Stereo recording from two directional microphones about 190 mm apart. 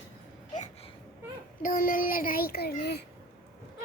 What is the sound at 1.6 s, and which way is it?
A child's voice, 45° left (ahead or behind).